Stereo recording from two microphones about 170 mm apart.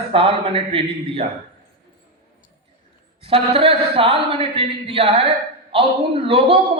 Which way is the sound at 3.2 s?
35° right (ahead or behind).